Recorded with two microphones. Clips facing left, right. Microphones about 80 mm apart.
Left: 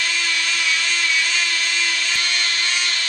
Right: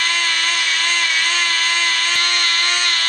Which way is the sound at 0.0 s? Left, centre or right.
Right.